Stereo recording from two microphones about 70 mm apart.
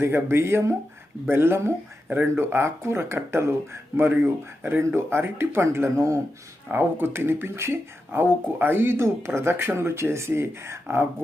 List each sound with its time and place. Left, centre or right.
0.0 s speech: right